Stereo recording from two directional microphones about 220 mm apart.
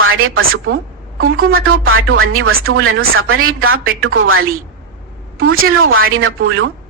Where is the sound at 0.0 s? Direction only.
65° right (ahead or behind).